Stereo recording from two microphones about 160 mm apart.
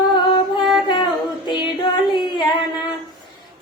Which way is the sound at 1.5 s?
30° left (ahead or behind).